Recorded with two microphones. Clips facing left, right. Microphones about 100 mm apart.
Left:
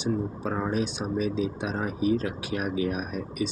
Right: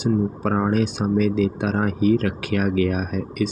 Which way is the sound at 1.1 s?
70° right (ahead or behind).